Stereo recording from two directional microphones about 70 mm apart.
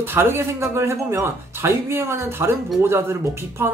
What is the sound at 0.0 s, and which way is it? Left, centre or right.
Speech, right.